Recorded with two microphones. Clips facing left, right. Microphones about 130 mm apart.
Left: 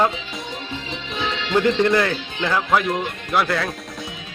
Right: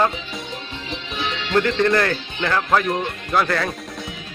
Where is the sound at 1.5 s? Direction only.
15° left (ahead or behind).